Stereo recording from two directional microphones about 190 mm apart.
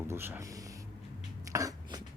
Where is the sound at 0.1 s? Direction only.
15° right (ahead or behind).